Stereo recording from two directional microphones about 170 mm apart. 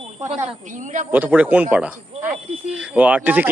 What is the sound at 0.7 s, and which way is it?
Speech, 45° right (ahead or behind).